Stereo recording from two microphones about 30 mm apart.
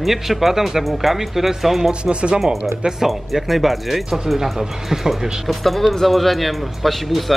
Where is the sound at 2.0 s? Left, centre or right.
Right.